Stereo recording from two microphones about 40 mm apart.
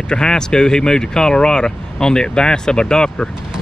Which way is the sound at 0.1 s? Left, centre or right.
Centre.